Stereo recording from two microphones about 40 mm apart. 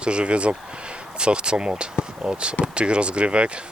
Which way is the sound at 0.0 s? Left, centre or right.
Right.